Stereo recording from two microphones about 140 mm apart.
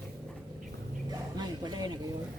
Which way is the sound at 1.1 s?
30° right (ahead or behind).